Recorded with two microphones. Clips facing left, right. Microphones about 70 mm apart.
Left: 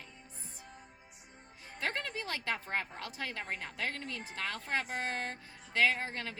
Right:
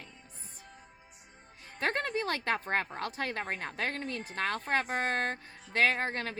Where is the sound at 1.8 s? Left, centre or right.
Right.